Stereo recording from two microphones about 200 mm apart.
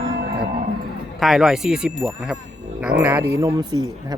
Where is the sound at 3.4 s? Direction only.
20° right (ahead or behind).